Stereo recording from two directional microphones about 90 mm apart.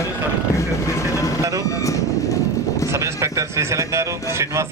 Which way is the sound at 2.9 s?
35° right (ahead or behind).